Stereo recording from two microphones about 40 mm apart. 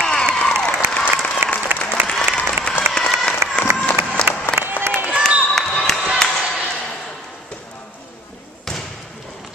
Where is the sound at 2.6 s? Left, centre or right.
Centre.